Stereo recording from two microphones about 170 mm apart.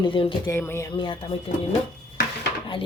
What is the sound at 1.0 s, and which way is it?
Speech, 30° left (ahead or behind).